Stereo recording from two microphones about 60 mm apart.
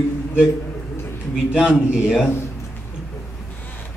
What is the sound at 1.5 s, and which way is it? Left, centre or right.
Speech, centre.